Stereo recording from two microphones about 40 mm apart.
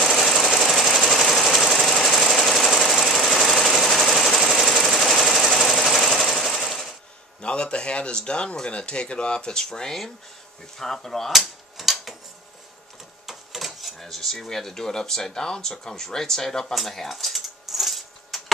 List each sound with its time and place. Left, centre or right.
0.0 s sewing machine: centre
7.4 s speech: left; by 11.3 s centre
11.3 s typewriter: centre
13.3 s printer: centre
13.9 s speech: centre
16.7 s keys jangling: centre